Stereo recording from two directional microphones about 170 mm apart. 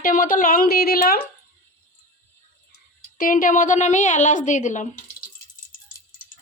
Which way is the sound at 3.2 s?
55° left (ahead or behind).